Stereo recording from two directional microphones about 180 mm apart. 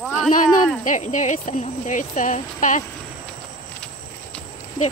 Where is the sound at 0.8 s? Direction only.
45° left (ahead or behind).